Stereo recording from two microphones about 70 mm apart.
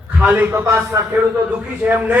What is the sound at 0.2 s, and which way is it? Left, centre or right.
Speech, right.